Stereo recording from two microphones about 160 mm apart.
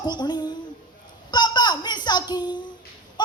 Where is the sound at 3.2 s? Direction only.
25° left (ahead or behind).